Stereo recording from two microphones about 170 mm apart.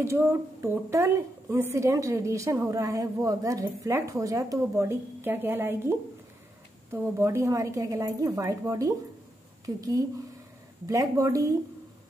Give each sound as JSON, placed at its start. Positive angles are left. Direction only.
{"t": 0.0, "sound": "a woman's voice", "side_deg": -15}